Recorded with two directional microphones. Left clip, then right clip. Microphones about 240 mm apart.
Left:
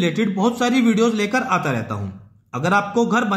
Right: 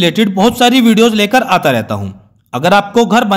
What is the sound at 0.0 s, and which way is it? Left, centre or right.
A man's voice, right.